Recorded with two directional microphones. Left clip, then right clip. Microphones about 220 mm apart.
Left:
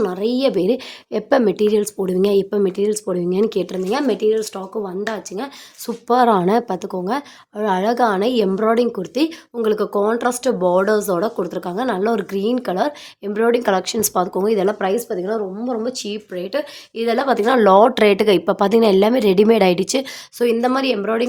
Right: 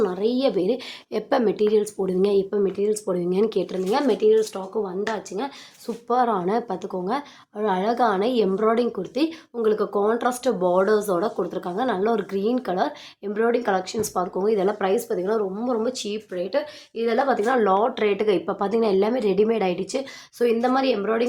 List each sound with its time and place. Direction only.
0.0 s a woman's voice: 35° left (ahead or behind)